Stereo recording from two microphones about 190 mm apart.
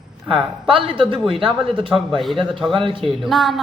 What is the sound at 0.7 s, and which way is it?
Speech, 30° right (ahead or behind).